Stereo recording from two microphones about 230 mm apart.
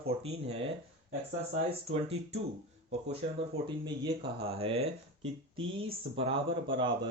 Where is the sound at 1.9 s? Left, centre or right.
Right.